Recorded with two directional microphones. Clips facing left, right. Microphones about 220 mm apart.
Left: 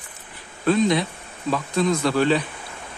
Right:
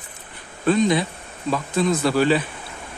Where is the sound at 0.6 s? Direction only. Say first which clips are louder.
Right 1 dB; centre (ahead or behind).